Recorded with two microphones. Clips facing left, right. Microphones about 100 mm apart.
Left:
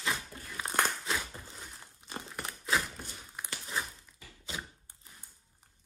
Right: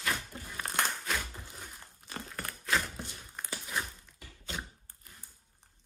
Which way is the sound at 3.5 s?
Centre (ahead or behind).